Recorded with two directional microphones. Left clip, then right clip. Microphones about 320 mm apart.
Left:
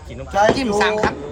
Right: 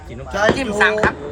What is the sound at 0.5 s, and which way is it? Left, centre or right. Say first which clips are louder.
Speech: right 1 dB; centre.